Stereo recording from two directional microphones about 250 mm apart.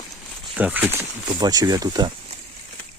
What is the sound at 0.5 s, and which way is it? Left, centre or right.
Speech, centre.